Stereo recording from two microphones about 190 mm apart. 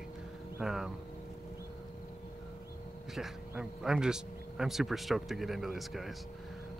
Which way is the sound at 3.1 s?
Centre (ahead or behind).